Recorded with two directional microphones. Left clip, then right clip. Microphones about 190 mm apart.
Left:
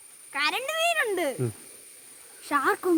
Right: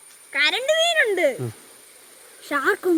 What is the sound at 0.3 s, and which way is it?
Speech, centre (ahead or behind).